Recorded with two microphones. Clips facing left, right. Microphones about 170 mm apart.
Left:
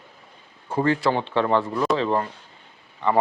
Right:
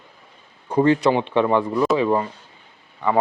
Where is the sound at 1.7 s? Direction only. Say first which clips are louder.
Right 4 dB; centre (ahead or behind).